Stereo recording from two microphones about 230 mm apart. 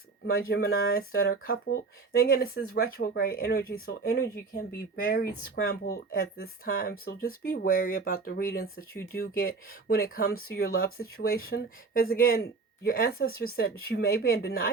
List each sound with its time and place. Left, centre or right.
0.3 s speech: left